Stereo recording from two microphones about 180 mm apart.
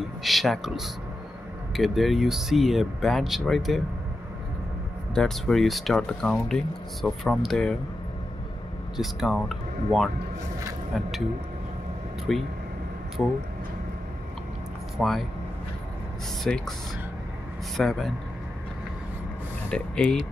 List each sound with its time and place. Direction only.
0.2 s speech: centre (ahead or behind)
5.1 s speech: 5° left (ahead or behind)
8.9 s speech: centre (ahead or behind)
12.3 s speech: centre (ahead or behind)
15.0 s speech: centre (ahead or behind)
16.4 s speech: 5° left (ahead or behind)
17.7 s speech: centre (ahead or behind)
19.7 s speech: 5° left (ahead or behind)